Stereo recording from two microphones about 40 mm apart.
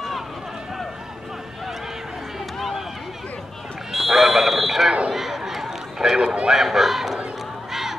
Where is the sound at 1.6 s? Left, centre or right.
Centre.